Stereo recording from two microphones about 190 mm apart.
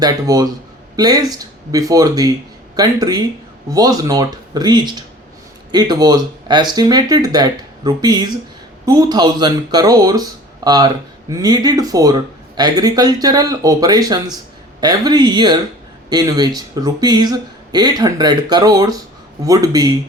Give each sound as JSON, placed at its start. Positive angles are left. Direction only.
{"t": 0.0, "sound": "speech", "side_deg": -20}